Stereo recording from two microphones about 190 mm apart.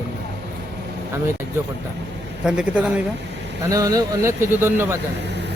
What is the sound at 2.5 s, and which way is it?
Speech, 5° right (ahead or behind).